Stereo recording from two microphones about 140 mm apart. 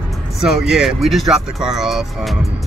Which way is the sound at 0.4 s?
5° right (ahead or behind).